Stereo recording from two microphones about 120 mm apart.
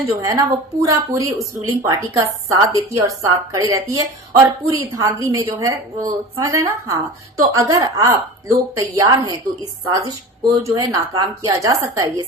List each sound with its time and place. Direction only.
0.2 s a woman's voice: 30° right (ahead or behind)
10.5 s a woman's voice: 25° right (ahead or behind)